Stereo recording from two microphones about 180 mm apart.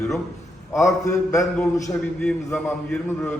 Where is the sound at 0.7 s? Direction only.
15° left (ahead or behind).